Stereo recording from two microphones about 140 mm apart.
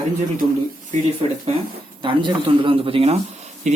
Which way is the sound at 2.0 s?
35° right (ahead or behind).